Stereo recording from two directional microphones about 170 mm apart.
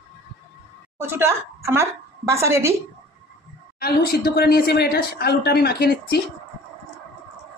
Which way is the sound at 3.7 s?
60° left (ahead or behind).